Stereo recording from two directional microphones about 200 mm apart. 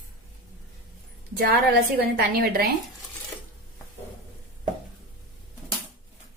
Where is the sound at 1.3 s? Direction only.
50° right (ahead or behind).